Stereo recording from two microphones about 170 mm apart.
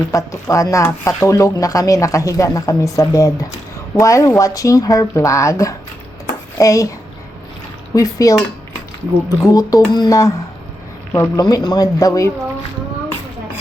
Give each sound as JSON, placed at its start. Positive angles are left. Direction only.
{"t": 0.1, "sound": "speech", "side_deg": 20}
{"t": 7.9, "sound": "speech", "side_deg": 20}
{"t": 9.4, "sound": "speech", "side_deg": 20}